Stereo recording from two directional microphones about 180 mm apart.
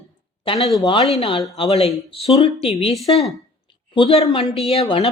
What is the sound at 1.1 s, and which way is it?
Speech, 30° left (ahead or behind).